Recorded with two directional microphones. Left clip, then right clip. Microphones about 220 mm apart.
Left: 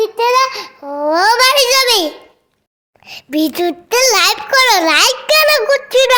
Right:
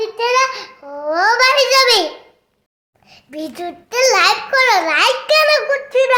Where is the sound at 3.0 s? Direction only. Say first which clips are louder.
Left 11 dB; 45° left (ahead or behind).